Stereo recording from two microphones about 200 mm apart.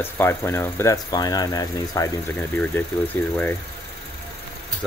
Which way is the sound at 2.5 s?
10° left (ahead or behind).